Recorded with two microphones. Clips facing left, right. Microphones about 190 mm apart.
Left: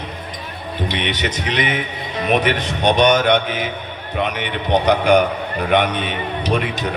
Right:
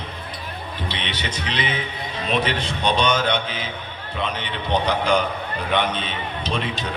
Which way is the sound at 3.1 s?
15° left (ahead or behind).